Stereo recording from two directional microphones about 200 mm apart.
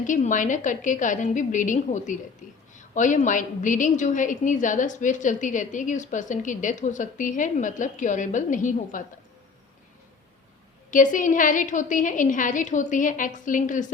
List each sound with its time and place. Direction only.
0.0 s a woman's voice: 40° left (ahead or behind)
10.9 s a woman's voice: 40° left (ahead or behind)